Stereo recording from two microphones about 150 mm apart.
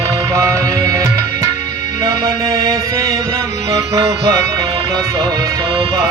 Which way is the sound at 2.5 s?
20° right (ahead or behind).